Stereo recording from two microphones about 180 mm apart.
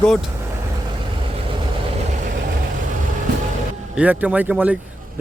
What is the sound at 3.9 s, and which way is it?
Speech, 5° right (ahead or behind).